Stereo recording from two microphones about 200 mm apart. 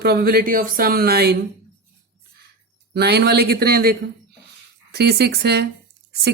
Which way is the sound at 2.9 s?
55° right (ahead or behind).